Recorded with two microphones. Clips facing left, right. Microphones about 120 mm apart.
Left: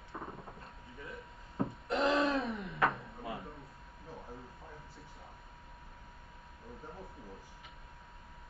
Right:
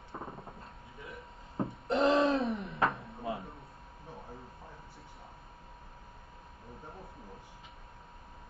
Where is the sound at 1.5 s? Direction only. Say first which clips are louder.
Right 3 dB; 25° right (ahead or behind).